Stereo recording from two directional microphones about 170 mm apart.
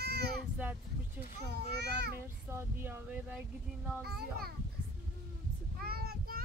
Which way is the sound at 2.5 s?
15° right (ahead or behind).